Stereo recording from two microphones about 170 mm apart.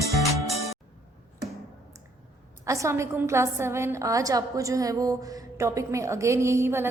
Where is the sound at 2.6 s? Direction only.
20° right (ahead or behind).